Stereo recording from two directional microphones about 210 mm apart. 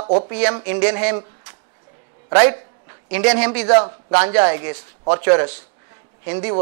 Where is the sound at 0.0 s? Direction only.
35° right (ahead or behind).